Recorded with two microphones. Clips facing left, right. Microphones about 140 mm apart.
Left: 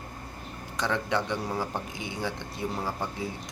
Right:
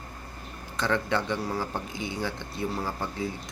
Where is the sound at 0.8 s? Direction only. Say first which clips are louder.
Right 1 dB; 15° left (ahead or behind).